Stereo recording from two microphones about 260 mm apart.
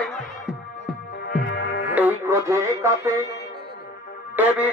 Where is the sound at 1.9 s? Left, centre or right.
Centre.